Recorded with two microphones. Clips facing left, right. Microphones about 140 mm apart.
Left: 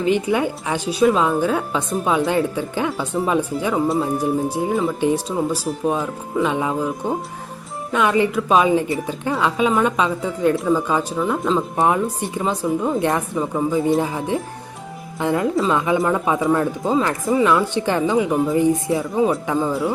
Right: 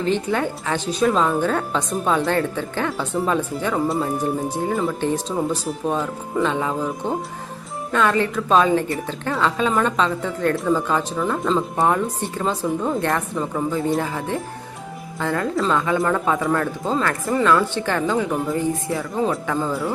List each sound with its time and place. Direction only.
0.0 s speech: 10° left (ahead or behind)
13.0 s speech: 15° left (ahead or behind)